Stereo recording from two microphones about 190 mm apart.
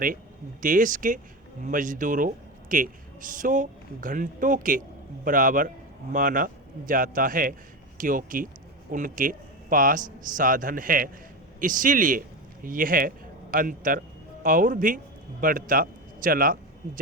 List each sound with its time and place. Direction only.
0.6 s a man's voice: 45° right (ahead or behind)